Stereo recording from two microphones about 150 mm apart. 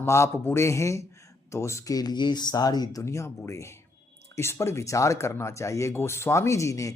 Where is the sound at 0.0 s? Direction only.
15° left (ahead or behind).